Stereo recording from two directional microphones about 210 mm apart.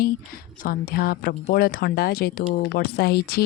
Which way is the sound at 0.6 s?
45° left (ahead or behind).